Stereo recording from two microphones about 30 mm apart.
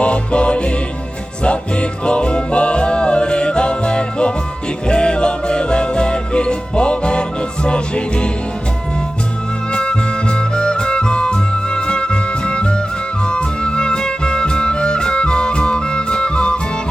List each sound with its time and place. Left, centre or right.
0.0 s music: left
9.7 s music: left